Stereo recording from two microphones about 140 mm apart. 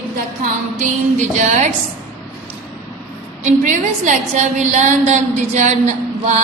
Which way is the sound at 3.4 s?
60° right (ahead or behind).